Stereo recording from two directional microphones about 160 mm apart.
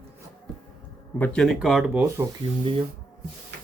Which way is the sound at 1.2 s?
5° left (ahead or behind).